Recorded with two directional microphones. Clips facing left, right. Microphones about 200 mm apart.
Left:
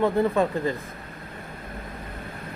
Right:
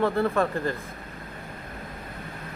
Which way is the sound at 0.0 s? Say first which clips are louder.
Left 2 dB; 15° left (ahead or behind).